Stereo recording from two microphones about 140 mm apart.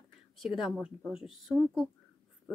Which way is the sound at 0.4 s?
Centre (ahead or behind).